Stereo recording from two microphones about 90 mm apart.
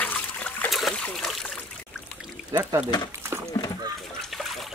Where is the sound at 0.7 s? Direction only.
Centre (ahead or behind).